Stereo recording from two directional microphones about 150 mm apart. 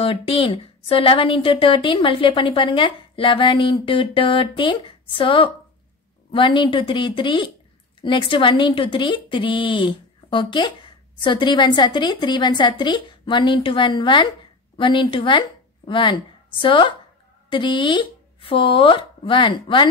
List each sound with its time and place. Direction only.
0.0 s a woman's voice: 35° left (ahead or behind)